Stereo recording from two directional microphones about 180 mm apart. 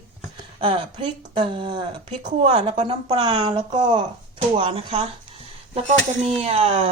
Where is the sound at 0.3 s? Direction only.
30° right (ahead or behind).